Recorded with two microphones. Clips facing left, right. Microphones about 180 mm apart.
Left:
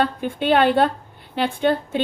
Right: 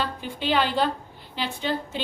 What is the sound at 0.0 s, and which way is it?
A woman's voice, 55° left (ahead or behind).